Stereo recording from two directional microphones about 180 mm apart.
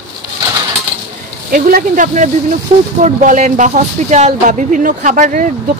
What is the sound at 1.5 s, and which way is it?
Speech, 50° right (ahead or behind).